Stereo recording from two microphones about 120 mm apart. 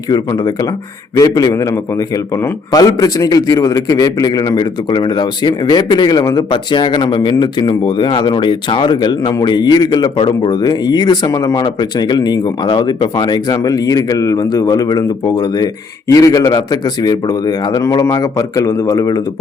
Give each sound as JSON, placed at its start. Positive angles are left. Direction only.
{"t": 0.1, "sound": "a man's voice", "side_deg": 35}